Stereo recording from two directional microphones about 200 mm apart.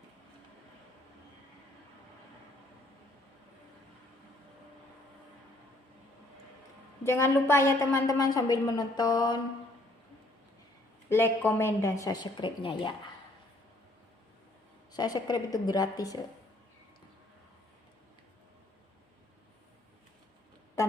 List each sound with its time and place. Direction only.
7.0 s a woman's voice: 15° left (ahead or behind)
11.1 s a woman's voice: 10° left (ahead or behind)
14.9 s a woman's voice: 20° left (ahead or behind)